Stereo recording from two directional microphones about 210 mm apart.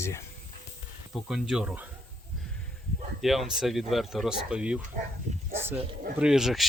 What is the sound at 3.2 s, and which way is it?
Speech, centre (ahead or behind).